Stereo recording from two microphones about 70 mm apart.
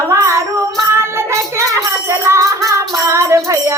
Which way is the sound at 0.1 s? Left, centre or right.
Right.